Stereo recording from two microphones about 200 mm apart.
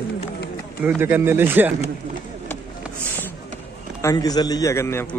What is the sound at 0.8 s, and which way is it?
Speech, 10° right (ahead or behind).